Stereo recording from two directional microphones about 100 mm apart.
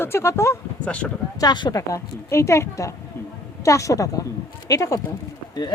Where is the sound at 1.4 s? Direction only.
45° left (ahead or behind).